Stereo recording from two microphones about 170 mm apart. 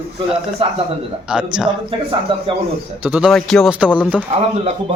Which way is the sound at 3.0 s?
5° right (ahead or behind).